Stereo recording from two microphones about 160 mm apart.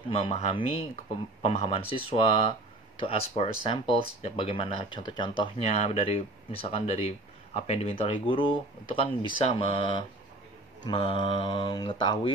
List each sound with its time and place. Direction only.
0.1 s speech: 40° left (ahead or behind)
5.7 s speech: 40° left (ahead or behind)